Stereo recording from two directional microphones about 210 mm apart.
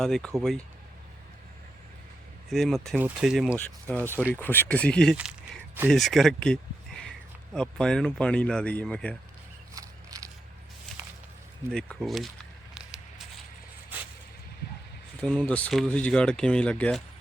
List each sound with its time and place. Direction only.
0.0 s speech: centre (ahead or behind)
2.5 s speech: centre (ahead or behind)
3.5 s speech: 10° left (ahead or behind)
9.7 s a sound: 15° right (ahead or behind)
11.7 s speech: 5° left (ahead or behind)
12.7 s a sound: 5° right (ahead or behind)
15.2 s speech: 5° left (ahead or behind)